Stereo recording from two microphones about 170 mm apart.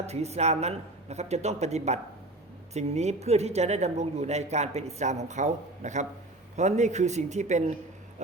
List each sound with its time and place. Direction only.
0.0 s speech: 40° right (ahead or behind)